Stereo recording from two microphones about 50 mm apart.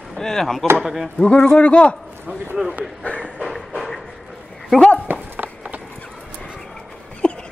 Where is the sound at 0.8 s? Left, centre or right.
Centre.